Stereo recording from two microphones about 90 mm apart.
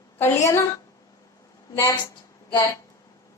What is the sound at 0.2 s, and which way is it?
Speech, 30° left (ahead or behind).